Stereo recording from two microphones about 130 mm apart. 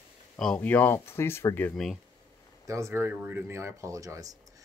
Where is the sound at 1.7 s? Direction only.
Centre (ahead or behind).